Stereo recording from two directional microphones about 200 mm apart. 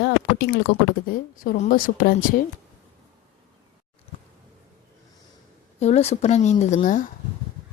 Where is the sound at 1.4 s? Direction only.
40° left (ahead or behind).